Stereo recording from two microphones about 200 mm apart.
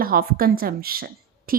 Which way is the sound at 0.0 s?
45° right (ahead or behind).